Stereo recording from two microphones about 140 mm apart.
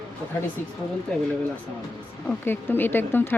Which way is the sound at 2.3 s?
15° left (ahead or behind).